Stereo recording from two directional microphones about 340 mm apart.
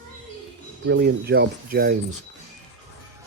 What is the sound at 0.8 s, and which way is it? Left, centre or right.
Speech, right.